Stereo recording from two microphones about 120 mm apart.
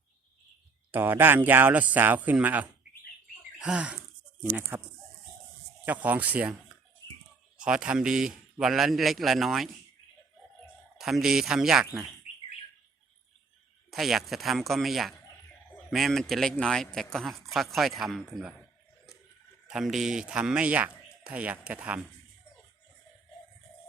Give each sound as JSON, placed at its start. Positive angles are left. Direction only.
{"t": 0.9, "sound": "speech", "side_deg": -15}
{"t": 7.0, "sound": "clicking", "side_deg": 30}
{"t": 7.6, "sound": "speech", "side_deg": -10}
{"t": 10.9, "sound": "speech", "side_deg": -5}
{"t": 13.9, "sound": "speech", "side_deg": 0}
{"t": 19.6, "sound": "speech", "side_deg": -5}